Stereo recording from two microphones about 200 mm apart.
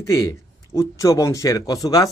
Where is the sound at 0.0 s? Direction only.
15° left (ahead or behind).